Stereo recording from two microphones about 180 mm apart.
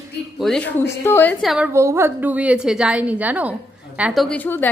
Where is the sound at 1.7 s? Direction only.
15° right (ahead or behind).